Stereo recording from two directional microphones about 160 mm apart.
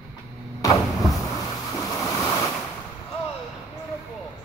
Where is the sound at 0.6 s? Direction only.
20° left (ahead or behind).